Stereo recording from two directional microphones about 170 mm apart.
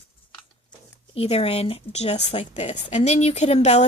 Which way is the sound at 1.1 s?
35° left (ahead or behind).